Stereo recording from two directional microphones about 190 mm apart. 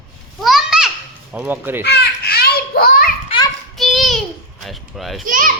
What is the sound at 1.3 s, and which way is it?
Speech, 10° right (ahead or behind).